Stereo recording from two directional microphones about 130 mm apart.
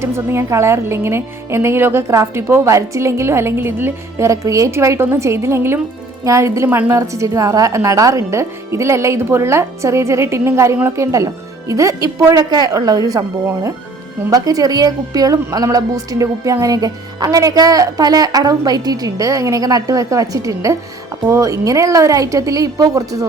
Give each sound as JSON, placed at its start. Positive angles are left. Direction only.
{"t": 0.0, "sound": "a woman's voice", "side_deg": -20}